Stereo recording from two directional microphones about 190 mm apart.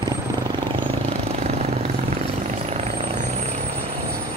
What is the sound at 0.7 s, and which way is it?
Vehicle, 30° right (ahead or behind).